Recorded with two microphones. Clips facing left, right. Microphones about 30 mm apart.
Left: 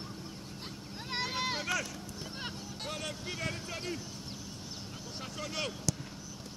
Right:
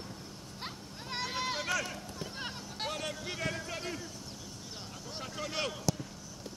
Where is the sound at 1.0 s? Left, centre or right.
Centre.